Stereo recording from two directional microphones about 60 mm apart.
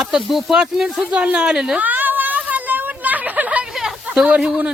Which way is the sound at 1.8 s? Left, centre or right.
Right.